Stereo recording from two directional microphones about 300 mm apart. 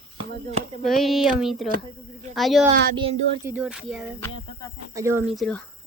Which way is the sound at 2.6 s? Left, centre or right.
Centre.